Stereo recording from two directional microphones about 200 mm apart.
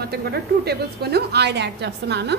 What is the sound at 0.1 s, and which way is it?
A woman's voice, 55° right (ahead or behind).